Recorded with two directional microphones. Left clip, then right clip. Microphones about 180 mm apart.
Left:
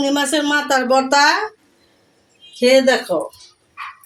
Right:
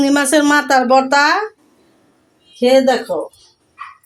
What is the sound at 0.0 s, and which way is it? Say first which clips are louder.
Speech: right 5 dB; 20° right (ahead or behind).